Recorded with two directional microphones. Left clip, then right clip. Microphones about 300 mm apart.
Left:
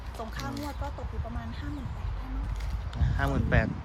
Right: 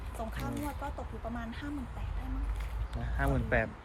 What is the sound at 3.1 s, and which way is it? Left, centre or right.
Speech, centre.